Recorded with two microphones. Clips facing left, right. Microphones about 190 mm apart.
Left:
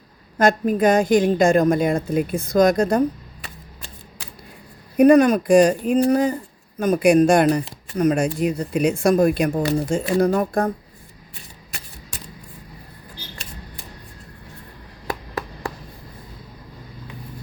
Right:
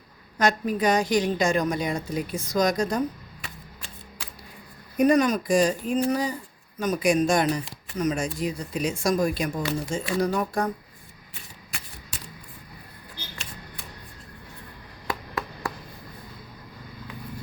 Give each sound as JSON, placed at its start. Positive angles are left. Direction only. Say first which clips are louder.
{"t": 0.3, "sound": "a woman's voice", "louder": "left 6 dB", "side_deg": 50}
{"t": 3.4, "sound": "a sound", "louder": "left 1 dB", "side_deg": 35}
{"t": 4.9, "sound": "speech", "louder": "left 7 dB", "side_deg": 60}
{"t": 6.1, "sound": "a woman's voice", "louder": "left 7 dB", "side_deg": 55}